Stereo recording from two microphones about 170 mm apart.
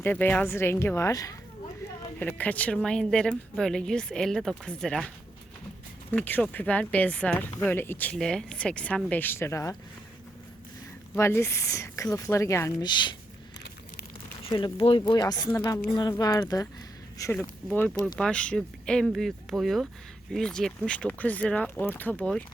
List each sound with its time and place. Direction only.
0.0 s speech: 10° left (ahead or behind)
2.1 s speech: 10° left (ahead or behind)
11.1 s speech: 15° left (ahead or behind)
14.4 s speech: 25° left (ahead or behind); by 22.4 s 5° left (ahead or behind)